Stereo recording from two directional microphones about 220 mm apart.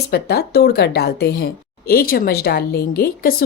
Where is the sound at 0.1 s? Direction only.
45° left (ahead or behind).